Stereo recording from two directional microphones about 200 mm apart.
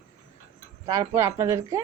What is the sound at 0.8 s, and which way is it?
Speech, 15° right (ahead or behind).